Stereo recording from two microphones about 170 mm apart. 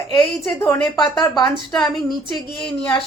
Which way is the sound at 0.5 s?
20° left (ahead or behind).